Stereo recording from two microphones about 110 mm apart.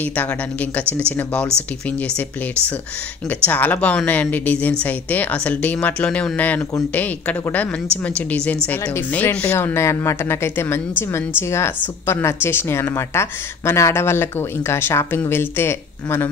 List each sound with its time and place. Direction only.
0.0 s a woman's voice: 15° left (ahead or behind)
3.4 s a woman's voice: 15° left (ahead or behind)